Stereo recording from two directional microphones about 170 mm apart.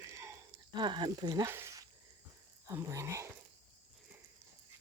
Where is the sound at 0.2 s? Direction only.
20° right (ahead or behind).